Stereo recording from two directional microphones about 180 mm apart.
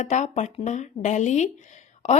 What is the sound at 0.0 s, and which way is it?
Speech, 40° left (ahead or behind).